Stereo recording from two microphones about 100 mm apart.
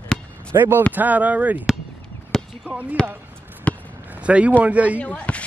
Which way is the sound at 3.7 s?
15° left (ahead or behind).